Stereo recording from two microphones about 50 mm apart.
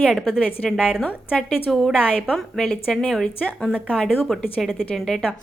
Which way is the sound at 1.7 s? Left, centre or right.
Centre.